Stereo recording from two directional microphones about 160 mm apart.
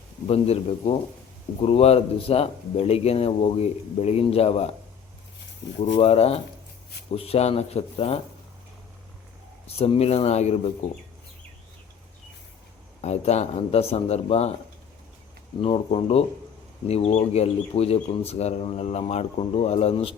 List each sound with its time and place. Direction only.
0.3 s speech: 40° left (ahead or behind)
6.0 s speech: 40° left (ahead or behind)
9.7 s speech: 40° left (ahead or behind)
13.0 s speech: 45° left (ahead or behind)
15.6 s speech: 35° left (ahead or behind)